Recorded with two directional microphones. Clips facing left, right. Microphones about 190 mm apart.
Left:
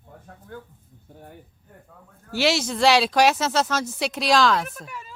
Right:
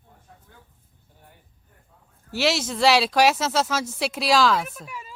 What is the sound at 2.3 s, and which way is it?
Speech, centre (ahead or behind).